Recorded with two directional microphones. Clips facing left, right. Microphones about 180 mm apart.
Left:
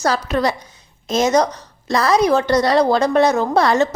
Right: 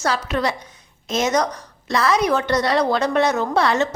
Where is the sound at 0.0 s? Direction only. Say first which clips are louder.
Left 3 dB; 40° left (ahead or behind).